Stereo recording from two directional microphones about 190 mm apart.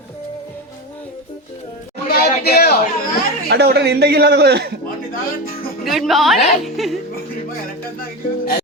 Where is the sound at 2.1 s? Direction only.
55° left (ahead or behind).